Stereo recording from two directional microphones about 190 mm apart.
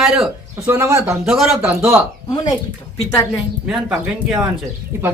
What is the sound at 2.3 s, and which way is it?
Speech, 20° left (ahead or behind).